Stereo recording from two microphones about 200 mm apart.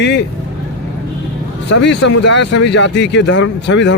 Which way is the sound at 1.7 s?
60° left (ahead or behind).